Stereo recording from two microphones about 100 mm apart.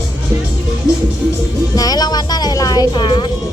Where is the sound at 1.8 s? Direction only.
40° left (ahead or behind).